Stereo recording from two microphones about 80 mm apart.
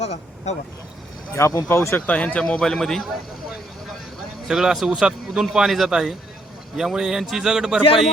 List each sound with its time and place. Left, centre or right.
1.4 s speech: left
2.0 s speech: centre
4.4 s speech: centre